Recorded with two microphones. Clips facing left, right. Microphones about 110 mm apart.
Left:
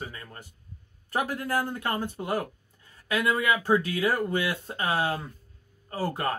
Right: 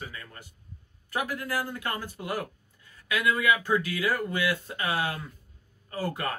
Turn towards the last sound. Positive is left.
turn(degrees=35)  # may be behind; listen again after turning